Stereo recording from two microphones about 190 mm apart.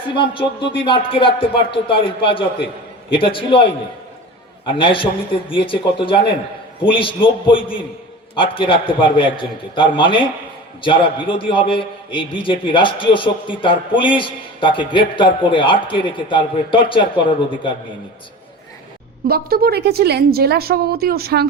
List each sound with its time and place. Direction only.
0.9 s a man's voice: 25° left (ahead or behind)
19.3 s a woman's voice: 55° right (ahead or behind)